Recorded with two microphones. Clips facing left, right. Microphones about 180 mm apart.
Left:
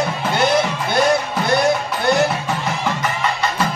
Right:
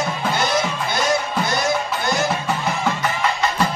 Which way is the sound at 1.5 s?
65° left (ahead or behind).